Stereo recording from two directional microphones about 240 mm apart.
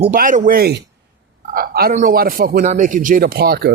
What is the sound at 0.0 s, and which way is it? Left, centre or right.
Speech, right.